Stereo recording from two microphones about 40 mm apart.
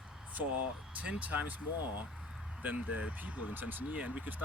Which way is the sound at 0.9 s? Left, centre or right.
Right.